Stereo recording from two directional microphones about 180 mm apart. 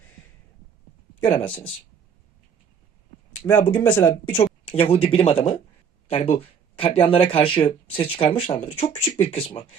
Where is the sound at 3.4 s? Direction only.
10° left (ahead or behind).